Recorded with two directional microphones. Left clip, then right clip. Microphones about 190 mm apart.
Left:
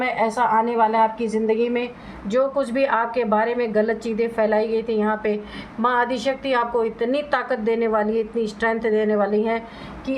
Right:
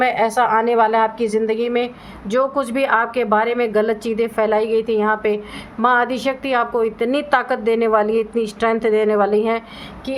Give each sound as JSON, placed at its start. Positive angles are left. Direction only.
{"t": 0.0, "sound": "a woman's voice", "side_deg": -50}
{"t": 2.3, "sound": "a woman's voice", "side_deg": -35}